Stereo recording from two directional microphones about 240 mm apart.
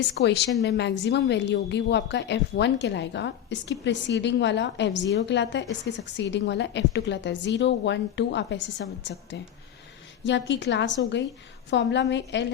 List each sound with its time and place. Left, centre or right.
0.1 s a woman's voice: left